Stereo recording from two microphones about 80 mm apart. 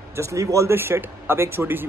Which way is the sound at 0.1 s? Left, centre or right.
Right.